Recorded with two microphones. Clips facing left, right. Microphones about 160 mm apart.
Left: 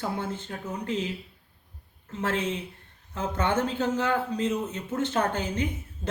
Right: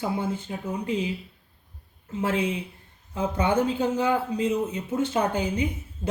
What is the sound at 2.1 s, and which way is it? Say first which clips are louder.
Speech: right 3 dB; 10° right (ahead or behind).